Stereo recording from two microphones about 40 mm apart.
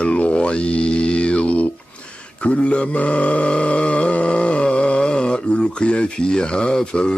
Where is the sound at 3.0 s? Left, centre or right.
Left.